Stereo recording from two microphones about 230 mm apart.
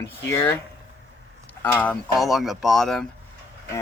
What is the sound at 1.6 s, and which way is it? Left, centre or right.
Speech, centre.